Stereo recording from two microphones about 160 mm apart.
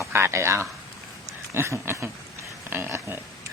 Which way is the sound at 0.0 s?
15° right (ahead or behind).